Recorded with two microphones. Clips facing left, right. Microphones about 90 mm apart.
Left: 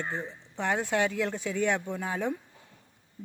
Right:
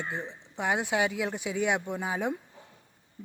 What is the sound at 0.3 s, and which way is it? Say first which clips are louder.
A woman's voice: right 2 dB; 15° right (ahead or behind).